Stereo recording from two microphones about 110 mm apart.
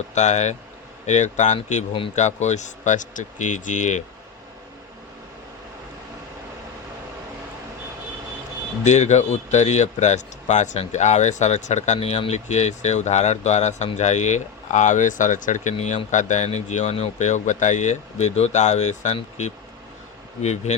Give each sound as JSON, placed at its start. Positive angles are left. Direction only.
{"t": 0.1, "sound": "speech", "side_deg": 90}
{"t": 8.8, "sound": "speech", "side_deg": 90}